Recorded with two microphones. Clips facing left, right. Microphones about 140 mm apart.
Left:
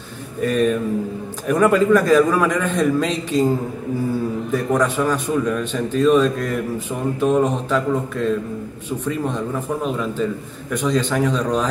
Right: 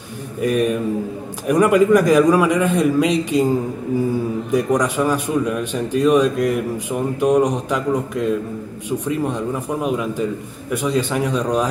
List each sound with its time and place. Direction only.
0.4 s a man's voice: 10° right (ahead or behind)